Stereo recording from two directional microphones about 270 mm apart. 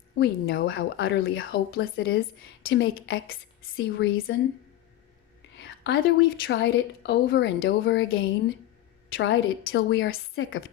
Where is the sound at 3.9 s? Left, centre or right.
Left.